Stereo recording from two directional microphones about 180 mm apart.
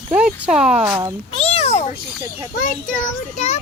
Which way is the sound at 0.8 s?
20° right (ahead or behind).